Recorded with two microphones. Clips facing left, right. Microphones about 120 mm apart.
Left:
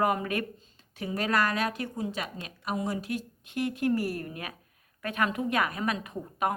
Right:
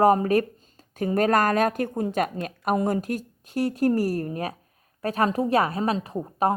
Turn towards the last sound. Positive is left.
turn(degrees=-35)  # may be behind; listen again after turning